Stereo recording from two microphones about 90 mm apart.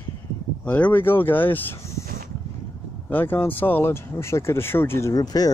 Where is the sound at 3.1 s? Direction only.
20° left (ahead or behind).